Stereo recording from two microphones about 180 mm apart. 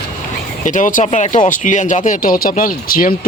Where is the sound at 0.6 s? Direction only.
45° left (ahead or behind).